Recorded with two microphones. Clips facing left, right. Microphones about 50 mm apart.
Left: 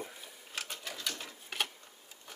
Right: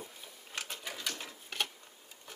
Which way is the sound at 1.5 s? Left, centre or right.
Centre.